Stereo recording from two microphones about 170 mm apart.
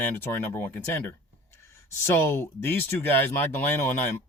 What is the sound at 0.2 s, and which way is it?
Speech, 10° left (ahead or behind).